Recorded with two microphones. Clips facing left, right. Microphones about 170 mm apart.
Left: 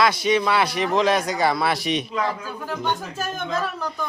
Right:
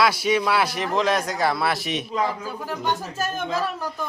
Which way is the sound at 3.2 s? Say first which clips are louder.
Right 1 dB; 5° right (ahead or behind).